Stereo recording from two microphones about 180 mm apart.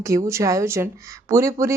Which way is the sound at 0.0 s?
15° right (ahead or behind).